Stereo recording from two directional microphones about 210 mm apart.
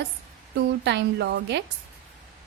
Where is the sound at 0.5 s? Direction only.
55° right (ahead or behind).